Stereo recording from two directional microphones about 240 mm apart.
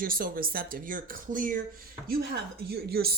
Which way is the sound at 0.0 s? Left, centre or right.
Right.